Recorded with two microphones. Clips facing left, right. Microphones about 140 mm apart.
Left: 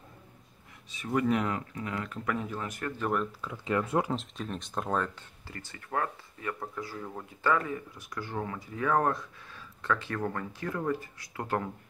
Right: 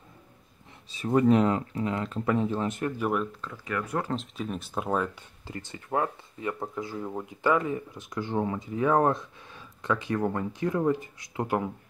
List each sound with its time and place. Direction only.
0.8 s speech: 30° right (ahead or behind)
3.0 s speech: 5° right (ahead or behind)
3.3 s speech: 10° left (ahead or behind)
3.5 s speech: 25° left (ahead or behind)
4.1 s speech: centre (ahead or behind)
5.5 s speech: 20° right (ahead or behind)